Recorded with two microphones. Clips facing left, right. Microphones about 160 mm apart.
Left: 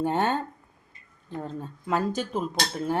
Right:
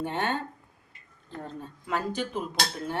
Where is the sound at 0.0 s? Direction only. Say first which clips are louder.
Left 5 dB; 40° left (ahead or behind).